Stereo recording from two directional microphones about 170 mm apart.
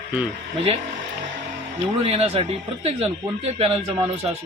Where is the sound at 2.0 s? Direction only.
35° right (ahead or behind).